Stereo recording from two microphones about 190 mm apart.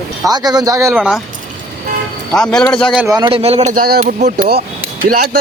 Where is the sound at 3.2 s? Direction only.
30° right (ahead or behind); by 4.6 s 50° right (ahead or behind).